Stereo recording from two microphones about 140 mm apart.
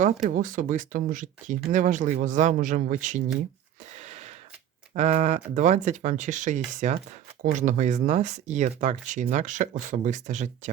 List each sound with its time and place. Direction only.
0.0 s speech: 65° right (ahead or behind)
3.9 s a sound: 55° right (ahead or behind)
4.9 s speech: 55° right (ahead or behind)